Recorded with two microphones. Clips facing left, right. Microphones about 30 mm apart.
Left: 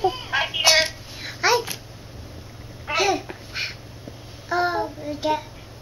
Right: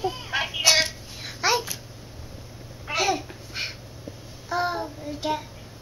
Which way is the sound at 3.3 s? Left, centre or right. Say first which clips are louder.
Left 4 dB; left.